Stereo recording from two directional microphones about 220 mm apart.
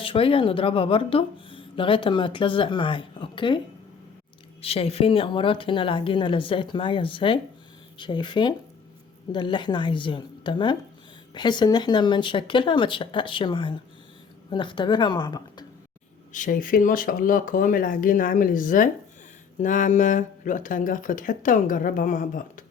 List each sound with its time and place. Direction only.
0.0 s speech: 25° left (ahead or behind)
4.6 s speech: 25° left (ahead or behind)
16.3 s speech: 35° left (ahead or behind)